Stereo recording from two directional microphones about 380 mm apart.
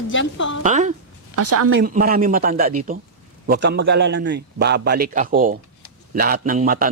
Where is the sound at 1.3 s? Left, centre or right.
Right.